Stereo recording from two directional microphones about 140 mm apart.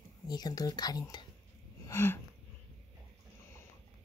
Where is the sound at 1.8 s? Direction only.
20° left (ahead or behind).